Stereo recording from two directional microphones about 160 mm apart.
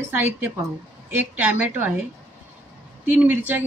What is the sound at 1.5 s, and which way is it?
Speech, 10° right (ahead or behind).